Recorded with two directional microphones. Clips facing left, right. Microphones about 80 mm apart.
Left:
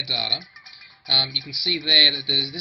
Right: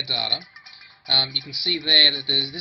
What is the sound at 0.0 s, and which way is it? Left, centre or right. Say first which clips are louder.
Speech: right 1 dB; right.